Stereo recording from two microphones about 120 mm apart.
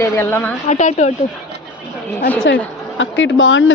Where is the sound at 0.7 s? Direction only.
75° left (ahead or behind).